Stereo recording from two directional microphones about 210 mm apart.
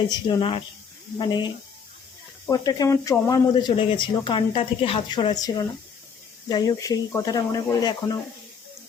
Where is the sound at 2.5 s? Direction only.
15° left (ahead or behind).